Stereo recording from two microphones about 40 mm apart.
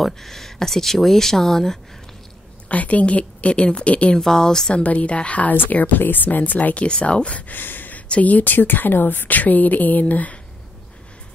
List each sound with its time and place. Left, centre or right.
0.0 s speech: centre
2.7 s speech: left; by 4.7 s centre
4.7 s speech: left
7.6 s a sound: left
8.2 s a woman's voice: left